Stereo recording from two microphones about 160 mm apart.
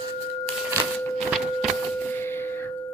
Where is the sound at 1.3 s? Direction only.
Centre (ahead or behind).